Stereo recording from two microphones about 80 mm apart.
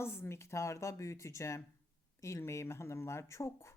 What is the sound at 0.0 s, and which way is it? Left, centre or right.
A woman's voice, left.